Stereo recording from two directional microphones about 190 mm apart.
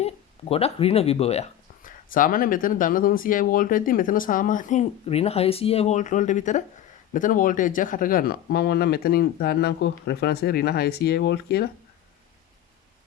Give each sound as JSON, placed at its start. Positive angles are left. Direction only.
{"t": 0.0, "sound": "speech", "side_deg": 30}